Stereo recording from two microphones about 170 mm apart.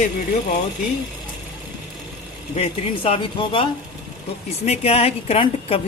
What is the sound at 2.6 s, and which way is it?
A woman's voice, 30° left (ahead or behind).